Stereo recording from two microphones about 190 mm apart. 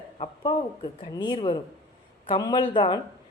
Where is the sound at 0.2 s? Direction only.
25° left (ahead or behind).